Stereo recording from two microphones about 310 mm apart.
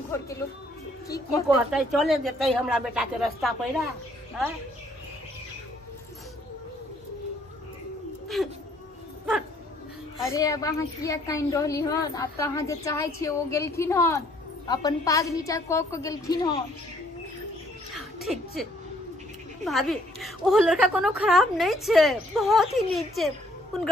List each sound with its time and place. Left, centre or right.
0.1 s music: centre
1.7 s a woman's voice: centre
8.4 s a woman's voice: centre
10.3 s a woman's voice: centre
17.9 s a sound: centre
19.6 s a woman's voice: centre